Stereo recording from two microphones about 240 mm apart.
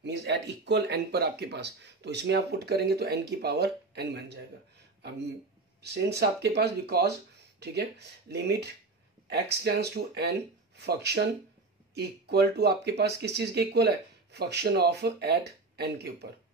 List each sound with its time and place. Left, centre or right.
0.0 s speech: right
5.8 s speech: right